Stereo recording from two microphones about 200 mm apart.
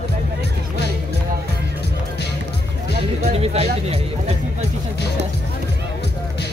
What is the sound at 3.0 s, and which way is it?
Speech, 30° right (ahead or behind).